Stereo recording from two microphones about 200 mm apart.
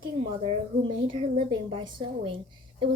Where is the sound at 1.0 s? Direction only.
30° right (ahead or behind).